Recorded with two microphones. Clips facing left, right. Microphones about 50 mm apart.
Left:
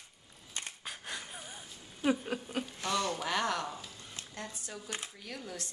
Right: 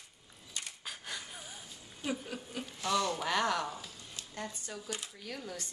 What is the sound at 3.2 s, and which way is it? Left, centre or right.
A woman's voice, centre.